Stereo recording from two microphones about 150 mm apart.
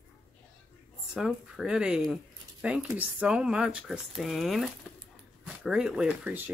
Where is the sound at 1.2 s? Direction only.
Centre (ahead or behind).